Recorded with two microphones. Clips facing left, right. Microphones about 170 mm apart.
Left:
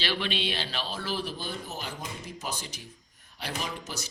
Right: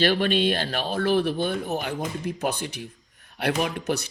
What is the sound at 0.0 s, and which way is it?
Speech, 50° right (ahead or behind).